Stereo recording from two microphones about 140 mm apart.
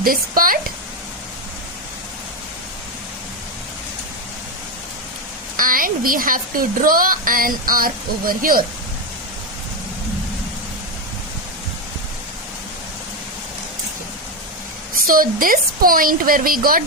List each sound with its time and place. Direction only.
0.0 s a woman's voice: 90° right
5.5 s a woman's voice: 80° right
15.0 s a woman's voice: 90° right